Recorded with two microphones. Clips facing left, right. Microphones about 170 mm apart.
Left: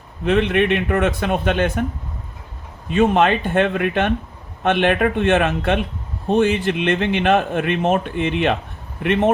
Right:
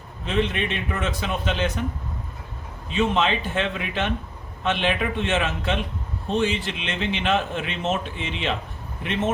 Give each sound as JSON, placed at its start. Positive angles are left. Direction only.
{"t": 0.3, "sound": "a man's voice", "side_deg": 60}
{"t": 2.9, "sound": "a man's voice", "side_deg": 55}